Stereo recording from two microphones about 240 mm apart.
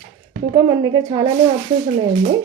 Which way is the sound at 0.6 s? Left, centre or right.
Centre.